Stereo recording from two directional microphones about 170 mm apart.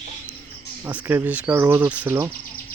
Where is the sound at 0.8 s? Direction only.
10° right (ahead or behind).